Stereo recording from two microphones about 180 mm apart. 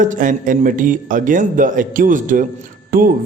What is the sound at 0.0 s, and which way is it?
A man's voice, 45° right (ahead or behind).